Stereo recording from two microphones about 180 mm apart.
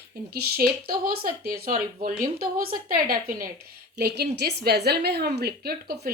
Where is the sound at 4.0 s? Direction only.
65° right (ahead or behind).